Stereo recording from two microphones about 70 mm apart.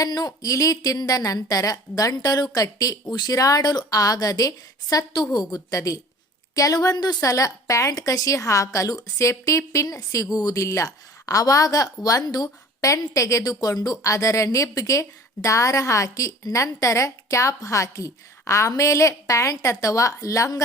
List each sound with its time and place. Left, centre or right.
0.0 s a woman's voice: left
5.3 s a woman's voice: left
12.9 s a woman's voice: left